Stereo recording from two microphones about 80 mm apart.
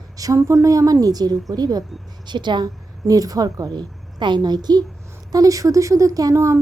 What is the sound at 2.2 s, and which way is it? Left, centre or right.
Speech, right.